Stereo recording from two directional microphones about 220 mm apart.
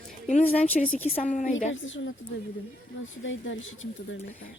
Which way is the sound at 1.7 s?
60° left (ahead or behind).